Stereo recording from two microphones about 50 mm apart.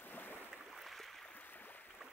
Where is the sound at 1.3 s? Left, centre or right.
Left.